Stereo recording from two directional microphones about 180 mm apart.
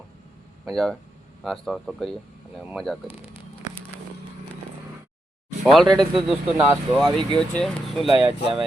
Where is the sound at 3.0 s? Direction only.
30° left (ahead or behind).